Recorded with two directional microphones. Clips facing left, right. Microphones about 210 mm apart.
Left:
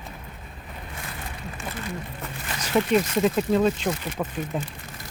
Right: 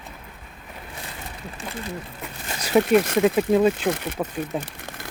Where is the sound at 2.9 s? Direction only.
60° right (ahead or behind).